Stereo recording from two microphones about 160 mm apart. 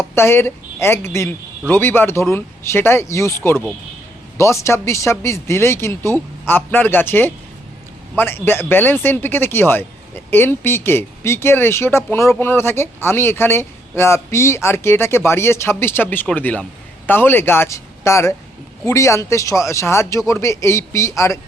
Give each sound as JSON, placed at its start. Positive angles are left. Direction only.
{"t": 0.0, "sound": "speech", "side_deg": 15}